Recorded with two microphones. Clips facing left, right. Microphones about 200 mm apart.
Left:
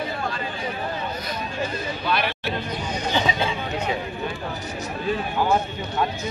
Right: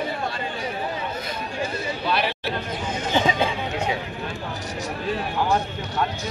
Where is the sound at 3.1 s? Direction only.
50° right (ahead or behind).